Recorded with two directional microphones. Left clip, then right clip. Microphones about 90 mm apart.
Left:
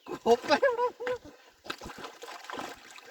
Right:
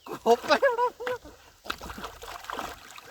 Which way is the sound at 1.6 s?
25° right (ahead or behind).